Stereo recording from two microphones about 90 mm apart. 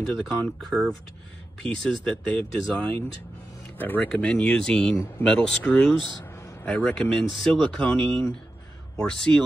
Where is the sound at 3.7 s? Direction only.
20° left (ahead or behind).